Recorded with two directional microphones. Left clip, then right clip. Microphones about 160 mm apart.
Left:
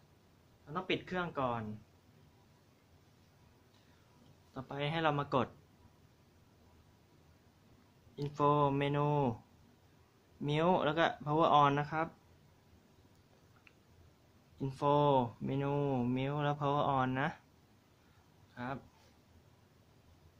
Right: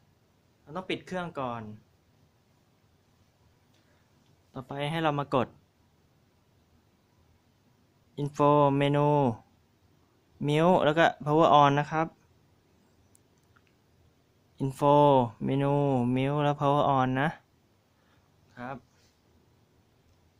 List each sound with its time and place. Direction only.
0.7 s speech: 45° right (ahead or behind)
4.5 s speech: 60° right (ahead or behind)
8.1 s speech: 65° right (ahead or behind)
10.4 s speech: 60° right (ahead or behind)
14.6 s speech: 65° right (ahead or behind)
18.5 s speech: 65° right (ahead or behind)